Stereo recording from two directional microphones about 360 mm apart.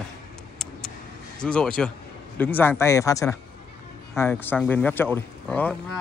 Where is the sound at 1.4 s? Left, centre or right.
Centre.